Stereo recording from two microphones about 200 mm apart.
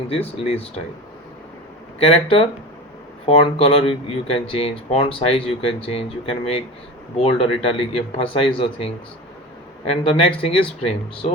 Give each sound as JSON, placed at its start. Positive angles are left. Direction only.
{"t": 0.1, "sound": "speech", "side_deg": 30}
{"t": 2.0, "sound": "speech", "side_deg": 30}
{"t": 3.2, "sound": "speech", "side_deg": 25}